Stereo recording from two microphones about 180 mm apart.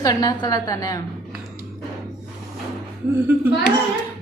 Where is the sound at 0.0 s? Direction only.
20° left (ahead or behind).